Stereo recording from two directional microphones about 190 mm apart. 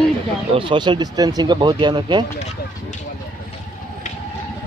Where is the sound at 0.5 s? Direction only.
25° right (ahead or behind).